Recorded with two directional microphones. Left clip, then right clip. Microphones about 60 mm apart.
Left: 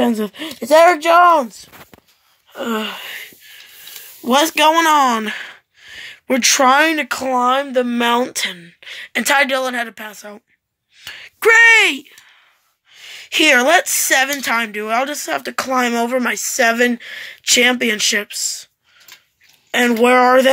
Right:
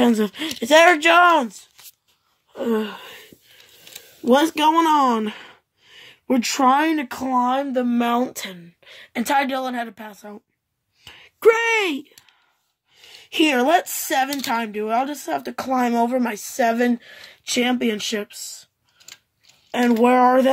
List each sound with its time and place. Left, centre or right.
0.0 s speech: centre
2.6 s speech: centre
4.3 s speech: centre
8.3 s speech: centre
11.1 s a sound: centre
11.5 s speech: centre
12.9 s speech: centre
17.4 s speech: centre
18.3 s speech: right
19.7 s speech: centre